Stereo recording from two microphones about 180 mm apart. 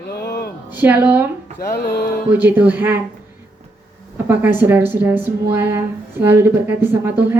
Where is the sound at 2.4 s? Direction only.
10° right (ahead or behind).